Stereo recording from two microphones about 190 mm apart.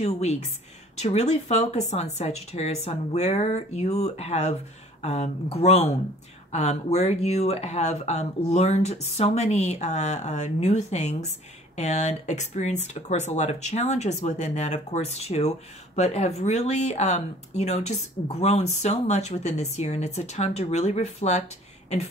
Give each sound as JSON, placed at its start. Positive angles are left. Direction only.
{"t": 0.0, "sound": "speech", "side_deg": 35}